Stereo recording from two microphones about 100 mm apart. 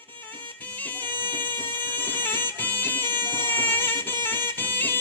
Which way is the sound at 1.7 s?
20° left (ahead or behind).